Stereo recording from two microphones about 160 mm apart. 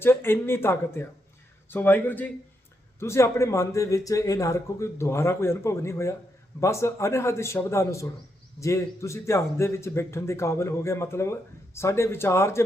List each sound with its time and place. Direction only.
0.0 s a man's voice: 15° left (ahead or behind)